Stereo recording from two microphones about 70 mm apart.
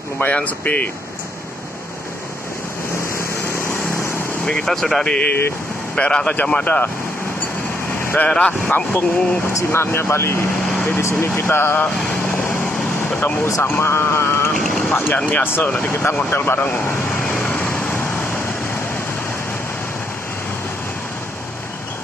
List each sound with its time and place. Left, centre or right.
0.2 s speech: left
3.2 s vehicle: left
4.5 s speech: centre
5.2 s speech: left
5.9 s speech: centre
8.0 s vehicle: left
8.3 s speech: centre
9.5 s speech: left
11.2 s speech: left
17.3 s vehicle: left